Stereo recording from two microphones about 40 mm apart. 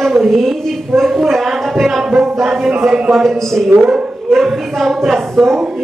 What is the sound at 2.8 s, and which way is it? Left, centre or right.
Speech, right.